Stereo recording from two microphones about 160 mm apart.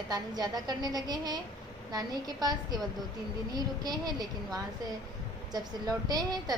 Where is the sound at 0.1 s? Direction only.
25° right (ahead or behind).